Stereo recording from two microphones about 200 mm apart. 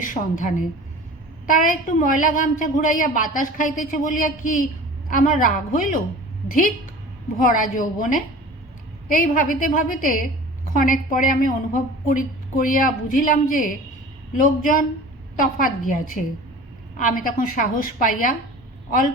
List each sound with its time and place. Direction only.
0.0 s a woman's voice: 40° left (ahead or behind)
7.3 s a woman's voice: 40° left (ahead or behind)